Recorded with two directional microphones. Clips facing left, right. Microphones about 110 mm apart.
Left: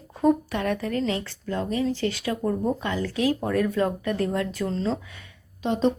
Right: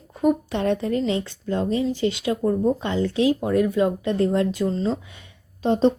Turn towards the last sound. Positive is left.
turn(degrees=-35)  # may be behind; listen again after turning